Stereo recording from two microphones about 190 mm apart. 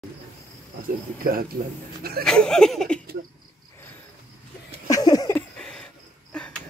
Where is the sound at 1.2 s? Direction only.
50° right (ahead or behind).